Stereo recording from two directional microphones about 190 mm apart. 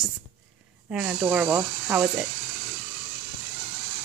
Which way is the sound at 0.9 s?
5° right (ahead or behind).